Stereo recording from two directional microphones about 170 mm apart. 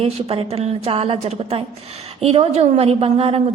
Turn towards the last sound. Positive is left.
turn(degrees=-35)  # may be behind; listen again after turning